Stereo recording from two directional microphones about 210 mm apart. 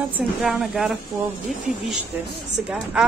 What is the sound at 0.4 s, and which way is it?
Speech, 5° right (ahead or behind).